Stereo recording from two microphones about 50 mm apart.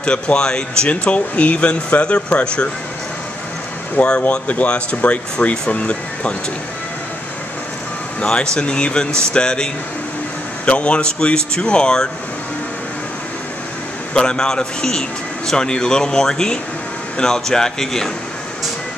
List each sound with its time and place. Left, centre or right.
0.0 s speech: left
4.0 s speech: left
8.2 s a man's voice: centre
14.1 s a man's voice: centre